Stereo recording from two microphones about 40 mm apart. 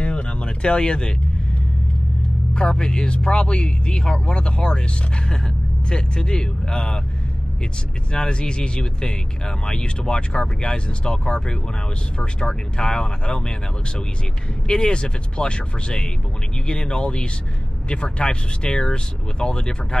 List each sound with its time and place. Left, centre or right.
0.0 s a sound: left
2.5 s speech: centre
8.1 s speech: left